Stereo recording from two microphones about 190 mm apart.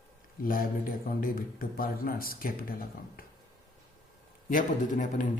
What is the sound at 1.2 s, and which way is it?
Speech, 50° left (ahead or behind).